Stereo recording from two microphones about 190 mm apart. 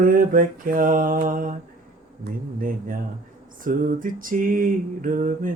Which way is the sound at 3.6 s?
45° right (ahead or behind).